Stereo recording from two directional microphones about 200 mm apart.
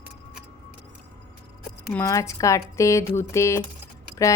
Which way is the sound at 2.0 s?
15° left (ahead or behind).